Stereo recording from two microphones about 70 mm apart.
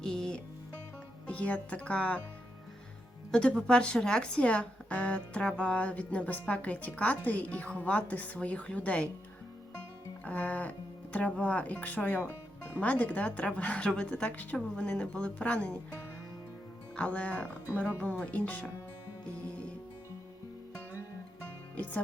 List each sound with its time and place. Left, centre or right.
0.0 s music: centre
1.3 s speech: centre
3.3 s speech: centre
10.2 s speech: left
17.0 s speech: centre